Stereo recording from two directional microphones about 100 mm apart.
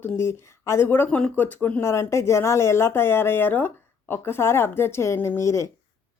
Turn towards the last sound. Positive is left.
turn(degrees=30)  # may be behind; listen again after turning